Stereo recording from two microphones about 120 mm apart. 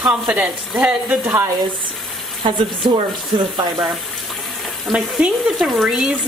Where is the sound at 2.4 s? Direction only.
45° right (ahead or behind).